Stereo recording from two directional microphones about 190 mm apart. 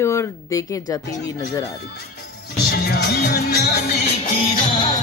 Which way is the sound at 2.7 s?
55° left (ahead or behind).